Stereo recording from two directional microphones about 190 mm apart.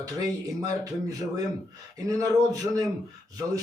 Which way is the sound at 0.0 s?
20° right (ahead or behind).